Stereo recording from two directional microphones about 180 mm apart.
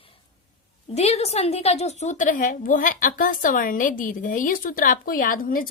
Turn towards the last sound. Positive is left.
turn(degrees=50)  # may be behind; listen again after turning